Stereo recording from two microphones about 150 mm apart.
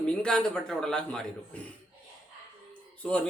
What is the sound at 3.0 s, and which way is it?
Speech, 5° left (ahead or behind).